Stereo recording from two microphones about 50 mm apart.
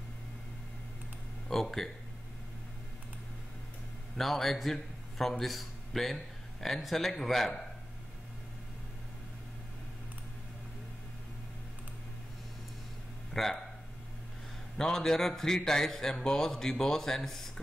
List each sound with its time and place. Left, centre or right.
1.5 s speech: centre
4.2 s a man's voice: centre
13.3 s a sound: centre
14.8 s a man's voice: centre